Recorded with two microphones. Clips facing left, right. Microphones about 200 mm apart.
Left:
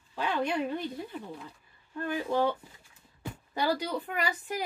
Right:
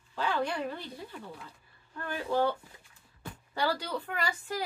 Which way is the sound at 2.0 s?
15° left (ahead or behind).